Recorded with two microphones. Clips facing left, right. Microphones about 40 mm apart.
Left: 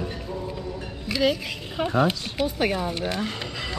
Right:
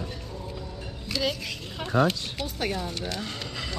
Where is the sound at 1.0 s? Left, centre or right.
Centre.